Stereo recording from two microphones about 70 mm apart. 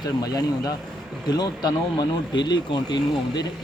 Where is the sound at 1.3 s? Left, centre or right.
Left.